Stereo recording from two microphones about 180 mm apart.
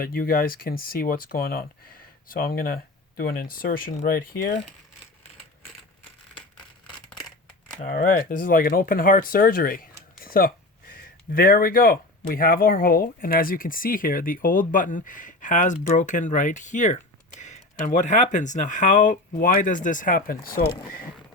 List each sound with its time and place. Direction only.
0.0 s speech: 55° left (ahead or behind)
7.8 s speech: 50° left (ahead or behind)